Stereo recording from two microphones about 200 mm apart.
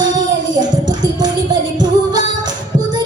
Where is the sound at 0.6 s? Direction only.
20° right (ahead or behind).